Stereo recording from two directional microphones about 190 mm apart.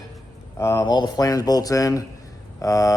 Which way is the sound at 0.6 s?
20° left (ahead or behind).